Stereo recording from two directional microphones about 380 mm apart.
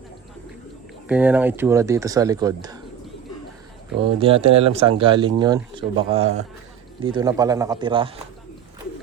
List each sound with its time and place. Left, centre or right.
1.0 s speech: centre
4.0 s speech: centre